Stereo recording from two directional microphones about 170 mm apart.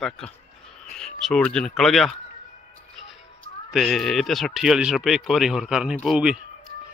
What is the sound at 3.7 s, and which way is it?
Speech, centre (ahead or behind).